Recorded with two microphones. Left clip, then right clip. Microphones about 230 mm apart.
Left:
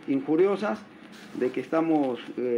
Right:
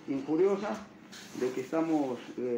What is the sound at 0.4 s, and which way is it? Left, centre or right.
Speech, left.